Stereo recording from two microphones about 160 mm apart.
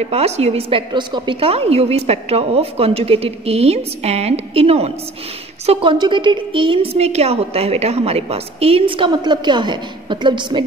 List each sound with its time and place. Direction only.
0.0 s a woman's voice: 40° right (ahead or behind)